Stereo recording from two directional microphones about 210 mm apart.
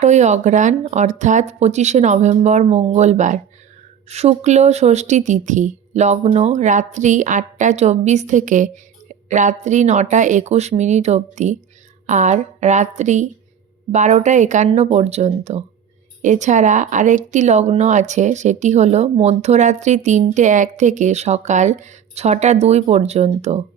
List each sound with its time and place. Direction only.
0.0 s speech: 35° right (ahead or behind)